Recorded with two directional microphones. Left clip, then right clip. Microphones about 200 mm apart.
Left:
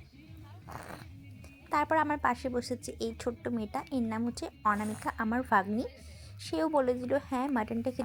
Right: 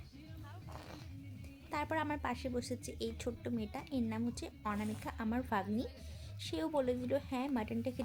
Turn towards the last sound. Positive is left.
turn(degrees=15)  # may be behind; listen again after turning